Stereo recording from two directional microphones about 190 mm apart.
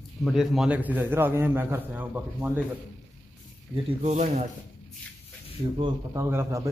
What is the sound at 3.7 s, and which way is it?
Speech, 35° right (ahead or behind).